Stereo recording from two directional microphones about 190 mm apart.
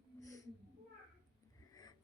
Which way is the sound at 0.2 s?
15° left (ahead or behind).